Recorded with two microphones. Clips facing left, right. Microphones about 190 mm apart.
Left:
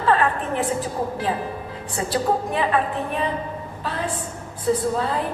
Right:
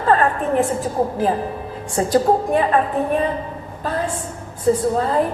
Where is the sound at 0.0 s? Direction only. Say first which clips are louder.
Right 3 dB; 40° right (ahead or behind).